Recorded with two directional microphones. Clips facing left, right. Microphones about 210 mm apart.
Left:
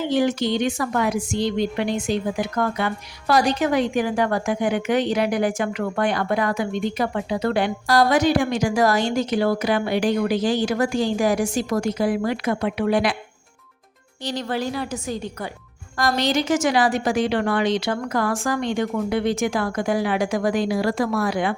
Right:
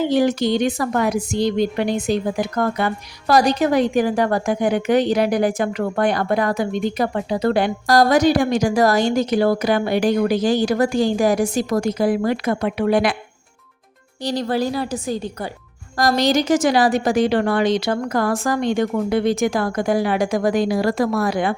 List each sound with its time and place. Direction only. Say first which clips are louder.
0.1 s a woman's voice: right 3 dB; 40° right (ahead or behind)
14.3 s a woman's voice: right 5 dB; 35° right (ahead or behind)